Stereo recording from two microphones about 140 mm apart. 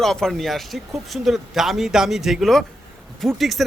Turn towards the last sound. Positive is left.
turn(degrees=0)  # may be behind; listen again after turning